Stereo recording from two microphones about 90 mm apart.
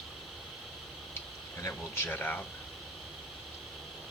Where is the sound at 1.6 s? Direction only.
30° left (ahead or behind).